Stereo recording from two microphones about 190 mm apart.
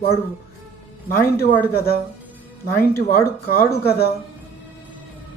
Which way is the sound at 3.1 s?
50° left (ahead or behind).